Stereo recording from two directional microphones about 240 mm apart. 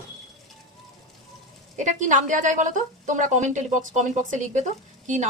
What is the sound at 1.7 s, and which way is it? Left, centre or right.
A woman's voice, right.